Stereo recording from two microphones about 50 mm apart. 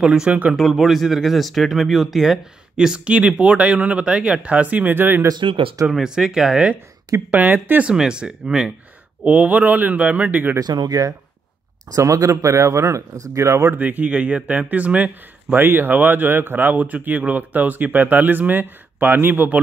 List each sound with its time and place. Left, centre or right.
0.0 s speech: centre
2.8 s speech: centre; by 5.2 s right
5.9 s speech: centre
7.2 s speech: right
7.9 s speech: centre
9.2 s speech: right
12.0 s speech: right
13.7 s speech: right
15.5 s speech: right